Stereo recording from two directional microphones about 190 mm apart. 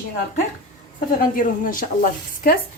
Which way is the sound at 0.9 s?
45° left (ahead or behind).